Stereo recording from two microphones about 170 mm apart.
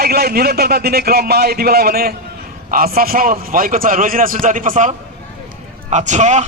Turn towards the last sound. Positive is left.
turn(degrees=-45)  # may be behind; listen again after turning